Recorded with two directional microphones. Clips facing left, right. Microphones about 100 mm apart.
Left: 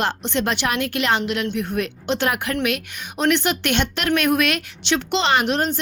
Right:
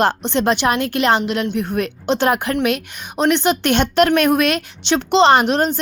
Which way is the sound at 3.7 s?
40° right (ahead or behind).